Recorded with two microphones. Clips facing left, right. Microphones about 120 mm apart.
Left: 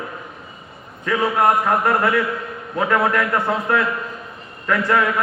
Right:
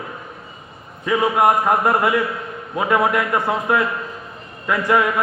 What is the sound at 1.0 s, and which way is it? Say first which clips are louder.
A man's voice: right 1 dB; 15° right (ahead or behind).